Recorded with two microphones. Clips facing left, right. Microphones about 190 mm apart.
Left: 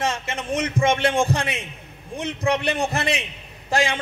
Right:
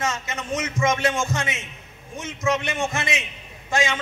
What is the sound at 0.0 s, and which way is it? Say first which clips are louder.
A man's voice: left 2 dB; 30° left (ahead or behind).